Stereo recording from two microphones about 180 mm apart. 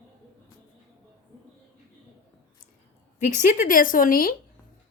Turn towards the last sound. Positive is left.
turn(degrees=50)  # may be behind; listen again after turning